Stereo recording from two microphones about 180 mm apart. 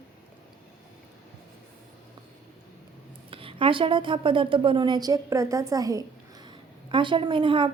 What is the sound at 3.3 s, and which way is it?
A woman's voice, 30° right (ahead or behind).